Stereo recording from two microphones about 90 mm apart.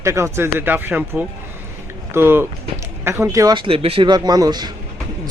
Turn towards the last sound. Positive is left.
turn(degrees=-50)  # may be behind; listen again after turning